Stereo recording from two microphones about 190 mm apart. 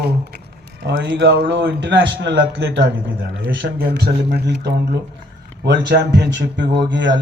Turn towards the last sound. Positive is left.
turn(degrees=-70)  # may be behind; listen again after turning